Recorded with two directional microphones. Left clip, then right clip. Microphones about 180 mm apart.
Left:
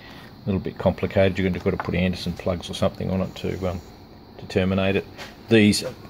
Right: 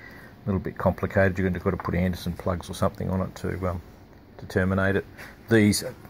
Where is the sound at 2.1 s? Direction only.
5° right (ahead or behind).